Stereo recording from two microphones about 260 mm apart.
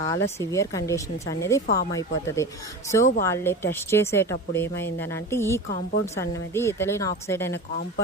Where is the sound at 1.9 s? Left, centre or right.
Centre.